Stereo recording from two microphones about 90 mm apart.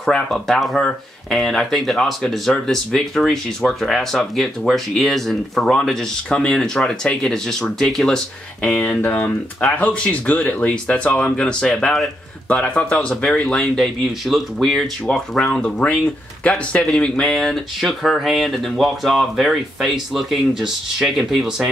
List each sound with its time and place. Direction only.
0.0 s speech: centre (ahead or behind)
16.8 s speech: 5° left (ahead or behind)